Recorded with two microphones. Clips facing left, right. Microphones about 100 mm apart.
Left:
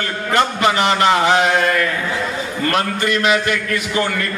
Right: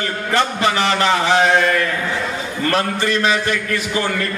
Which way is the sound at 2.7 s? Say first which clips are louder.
Right 1 dB; 30° right (ahead or behind).